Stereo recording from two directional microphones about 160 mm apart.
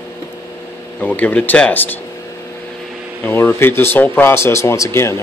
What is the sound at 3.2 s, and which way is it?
Speech, 15° left (ahead or behind).